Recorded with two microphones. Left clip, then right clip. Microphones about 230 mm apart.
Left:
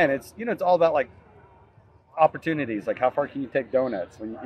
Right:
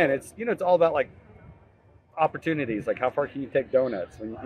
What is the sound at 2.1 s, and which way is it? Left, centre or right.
A man's voice, centre.